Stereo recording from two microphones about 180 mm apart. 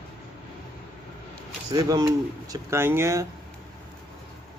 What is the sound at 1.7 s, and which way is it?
Speech, 20° right (ahead or behind).